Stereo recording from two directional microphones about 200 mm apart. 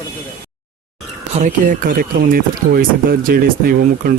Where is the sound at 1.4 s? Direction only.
40° right (ahead or behind).